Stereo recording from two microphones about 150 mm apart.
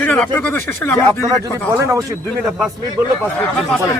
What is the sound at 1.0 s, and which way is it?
Speech, 25° right (ahead or behind).